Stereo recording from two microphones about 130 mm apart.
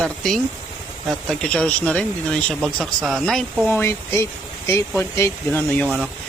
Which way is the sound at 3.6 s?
20° left (ahead or behind).